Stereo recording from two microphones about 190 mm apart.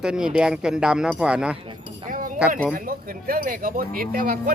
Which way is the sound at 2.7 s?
50° right (ahead or behind).